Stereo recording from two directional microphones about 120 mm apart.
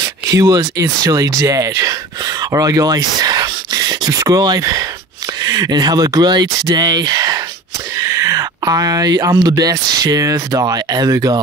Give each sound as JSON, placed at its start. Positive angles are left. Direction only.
{"t": 0.0, "sound": "speech", "side_deg": -30}